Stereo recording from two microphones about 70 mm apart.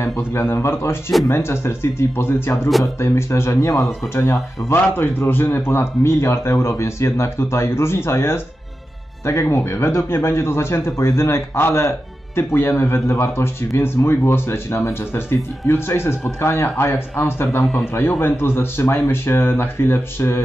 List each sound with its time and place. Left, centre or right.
0.0 s speech: left
4.6 s speech: left